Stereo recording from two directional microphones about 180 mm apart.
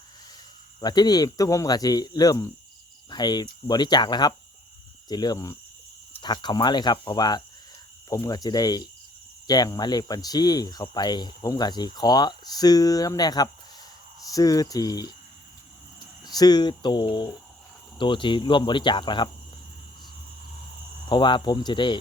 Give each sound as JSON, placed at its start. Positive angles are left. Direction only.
{"t": 0.8, "sound": "speech", "side_deg": 20}
{"t": 16.2, "sound": "speech", "side_deg": 20}
{"t": 21.1, "sound": "speech", "side_deg": 25}